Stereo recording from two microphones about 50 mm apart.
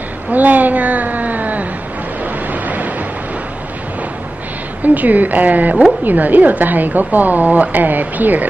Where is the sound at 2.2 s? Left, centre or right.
Right.